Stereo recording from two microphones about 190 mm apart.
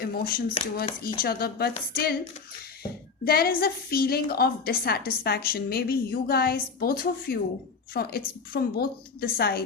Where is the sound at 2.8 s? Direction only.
55° left (ahead or behind).